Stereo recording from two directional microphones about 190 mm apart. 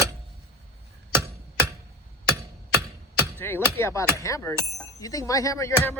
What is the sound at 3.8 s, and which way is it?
Speech, 15° left (ahead or behind).